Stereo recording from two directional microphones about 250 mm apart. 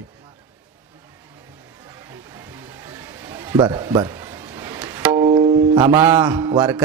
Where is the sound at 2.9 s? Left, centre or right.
Centre.